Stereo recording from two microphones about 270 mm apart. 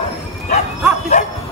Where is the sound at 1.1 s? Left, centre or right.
Left.